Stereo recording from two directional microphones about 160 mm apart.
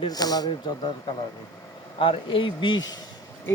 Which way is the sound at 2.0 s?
35° left (ahead or behind).